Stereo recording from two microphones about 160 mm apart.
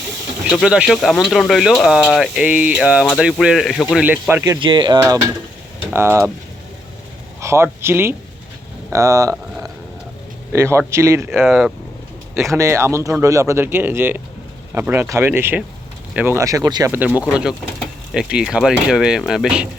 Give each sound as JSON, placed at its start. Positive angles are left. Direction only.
{"t": 0.5, "sound": "speech", "side_deg": -5}
{"t": 4.0, "sound": "speech", "side_deg": -10}
{"t": 4.6, "sound": "speech", "side_deg": -30}
{"t": 7.4, "sound": "speech", "side_deg": -15}
{"t": 10.5, "sound": "speech", "side_deg": -15}
{"t": 11.4, "sound": "speech", "side_deg": -5}
{"t": 12.3, "sound": "speech", "side_deg": -15}
{"t": 17.2, "sound": "speech", "side_deg": -5}